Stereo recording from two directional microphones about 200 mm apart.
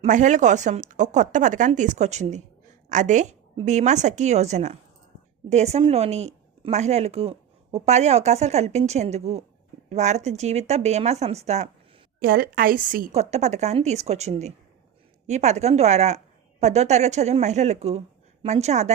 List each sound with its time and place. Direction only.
0.0 s speech: 40° right (ahead or behind)
12.2 s speech: 45° right (ahead or behind)